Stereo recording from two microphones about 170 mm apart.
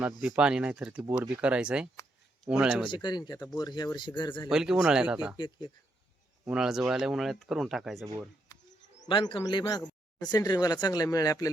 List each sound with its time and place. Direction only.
0.2 s speech: 5° right (ahead or behind)
2.9 s speech: 25° left (ahead or behind)
4.4 s speech: 5° right (ahead or behind)
5.4 s speech: 30° left (ahead or behind)
6.5 s speech: 5° right (ahead or behind)
9.0 s speech: 30° left (ahead or behind)